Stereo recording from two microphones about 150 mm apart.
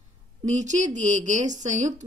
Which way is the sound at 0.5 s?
50° right (ahead or behind).